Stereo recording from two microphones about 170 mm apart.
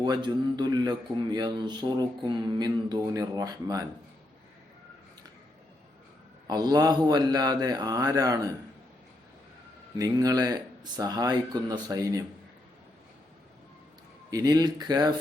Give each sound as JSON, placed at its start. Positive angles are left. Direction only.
{"t": 0.0, "sound": "a man's voice", "side_deg": -25}
{"t": 6.5, "sound": "a man's voice", "side_deg": -25}
{"t": 10.0, "sound": "a man's voice", "side_deg": -20}
{"t": 14.3, "sound": "a man's voice", "side_deg": -20}